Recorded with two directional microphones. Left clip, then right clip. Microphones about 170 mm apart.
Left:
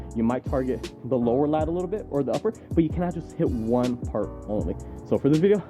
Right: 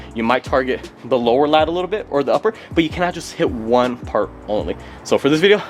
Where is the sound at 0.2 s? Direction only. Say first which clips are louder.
Right 10 dB; 10° right (ahead or behind).